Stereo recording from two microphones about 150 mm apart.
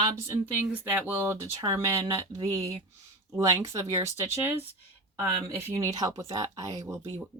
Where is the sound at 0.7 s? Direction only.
10° right (ahead or behind).